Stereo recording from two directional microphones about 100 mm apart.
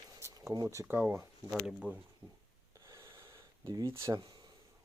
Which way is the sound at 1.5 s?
10° right (ahead or behind).